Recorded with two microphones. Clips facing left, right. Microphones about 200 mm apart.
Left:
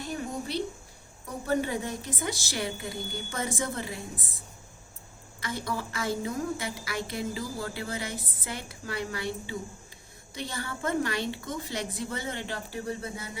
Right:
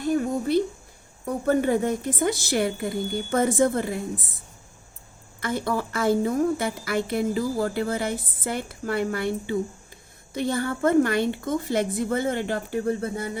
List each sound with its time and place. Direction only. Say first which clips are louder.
0.0 s a woman's voice: right 10 dB; 50° right (ahead or behind)
5.4 s a woman's voice: right 7 dB; 55° right (ahead or behind)